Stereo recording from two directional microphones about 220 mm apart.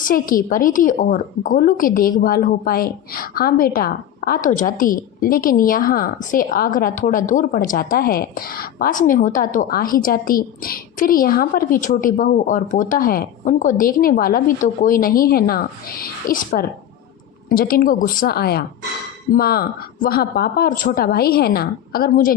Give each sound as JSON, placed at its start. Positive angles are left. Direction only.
{"t": 0.0, "sound": "a woman's voice", "side_deg": 40}